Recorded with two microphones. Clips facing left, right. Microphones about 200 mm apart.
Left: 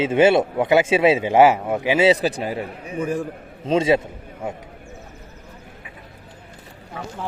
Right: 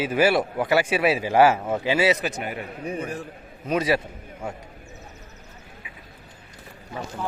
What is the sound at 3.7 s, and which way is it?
Speech, 25° left (ahead or behind).